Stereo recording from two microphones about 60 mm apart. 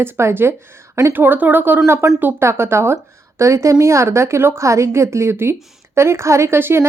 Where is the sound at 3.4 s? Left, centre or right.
Right.